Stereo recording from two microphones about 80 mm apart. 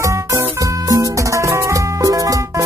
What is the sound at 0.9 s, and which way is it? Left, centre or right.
Music, right.